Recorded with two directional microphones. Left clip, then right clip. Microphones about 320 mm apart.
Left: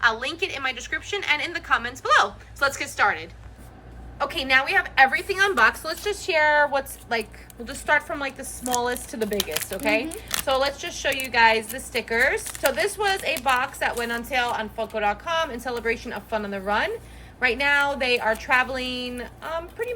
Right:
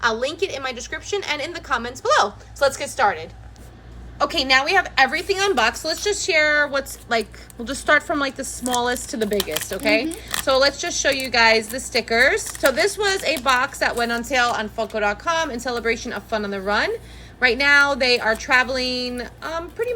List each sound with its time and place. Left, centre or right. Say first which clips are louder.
0.0 s a woman's voice: right 1 dB; centre